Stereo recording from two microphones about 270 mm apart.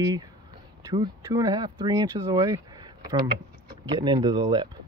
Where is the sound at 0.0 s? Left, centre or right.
Centre.